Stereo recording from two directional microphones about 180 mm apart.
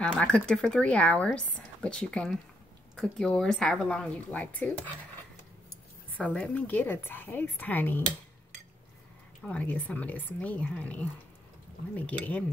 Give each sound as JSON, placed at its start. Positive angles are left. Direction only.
{"t": 0.0, "sound": "speech", "side_deg": 5}
{"t": 6.3, "sound": "a woman's voice", "side_deg": 10}
{"t": 9.4, "sound": "a woman's voice", "side_deg": 5}